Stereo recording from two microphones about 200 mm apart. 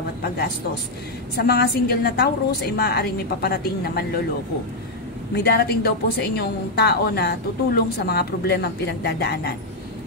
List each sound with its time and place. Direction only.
1.3 s a woman's voice: 55° left (ahead or behind)
5.3 s a woman's voice: 55° left (ahead or behind)